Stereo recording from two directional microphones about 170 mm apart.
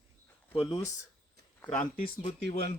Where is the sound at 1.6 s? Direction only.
10° left (ahead or behind).